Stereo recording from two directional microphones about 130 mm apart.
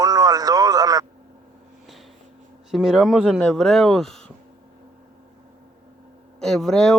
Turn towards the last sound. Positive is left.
turn(degrees=5)  # may be behind; listen again after turning